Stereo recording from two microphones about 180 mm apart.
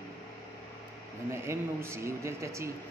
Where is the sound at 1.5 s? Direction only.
15° right (ahead or behind).